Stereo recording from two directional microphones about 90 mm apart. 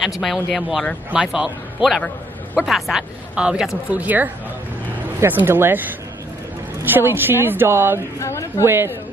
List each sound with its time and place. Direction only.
0.0 s speech: centre (ahead or behind); by 8.0 s 25° right (ahead or behind)
8.2 s a woman's voice: 30° left (ahead or behind)
8.6 s speech: 25° right (ahead or behind)